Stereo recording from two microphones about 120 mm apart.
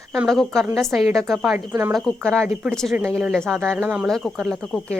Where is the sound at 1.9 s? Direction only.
5° left (ahead or behind).